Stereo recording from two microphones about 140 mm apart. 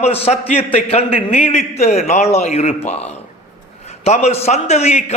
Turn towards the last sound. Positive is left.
turn(degrees=50)  # may be behind; listen again after turning